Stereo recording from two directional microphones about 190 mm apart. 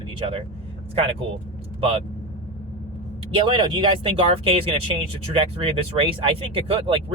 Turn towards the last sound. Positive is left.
turn(degrees=-30)  # may be behind; listen again after turning